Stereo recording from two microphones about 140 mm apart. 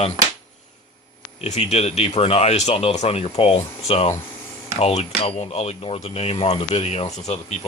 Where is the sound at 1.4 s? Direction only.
50° left (ahead or behind).